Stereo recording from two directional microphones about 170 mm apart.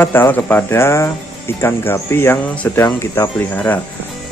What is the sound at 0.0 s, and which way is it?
Speech, 10° left (ahead or behind).